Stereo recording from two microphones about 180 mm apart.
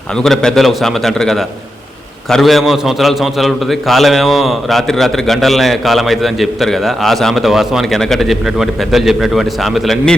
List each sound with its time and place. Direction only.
0.2 s a man's voice: 5° left (ahead or behind)